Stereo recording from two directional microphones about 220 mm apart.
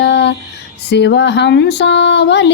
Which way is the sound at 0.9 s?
50° left (ahead or behind).